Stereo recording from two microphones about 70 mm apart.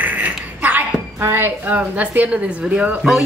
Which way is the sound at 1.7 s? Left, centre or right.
Right.